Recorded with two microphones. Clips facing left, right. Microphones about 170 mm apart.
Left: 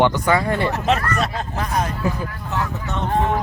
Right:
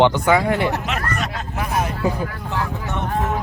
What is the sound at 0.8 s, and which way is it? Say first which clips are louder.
Speech: left 5 dB; 35° left (ahead or behind).